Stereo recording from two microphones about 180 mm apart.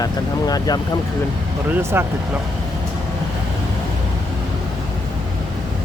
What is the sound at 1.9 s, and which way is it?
Speech, 15° right (ahead or behind).